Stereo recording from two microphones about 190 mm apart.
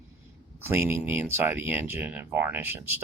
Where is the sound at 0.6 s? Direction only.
10° right (ahead or behind).